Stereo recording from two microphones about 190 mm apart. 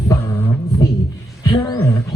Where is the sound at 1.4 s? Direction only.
20° left (ahead or behind).